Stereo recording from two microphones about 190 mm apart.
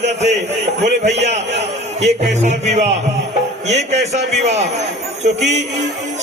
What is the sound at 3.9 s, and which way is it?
Speech, 35° right (ahead or behind).